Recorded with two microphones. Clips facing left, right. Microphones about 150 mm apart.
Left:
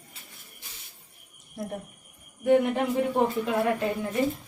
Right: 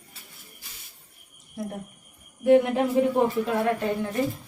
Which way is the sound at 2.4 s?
Centre (ahead or behind).